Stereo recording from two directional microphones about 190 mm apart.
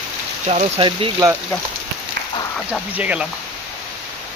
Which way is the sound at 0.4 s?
35° right (ahead or behind).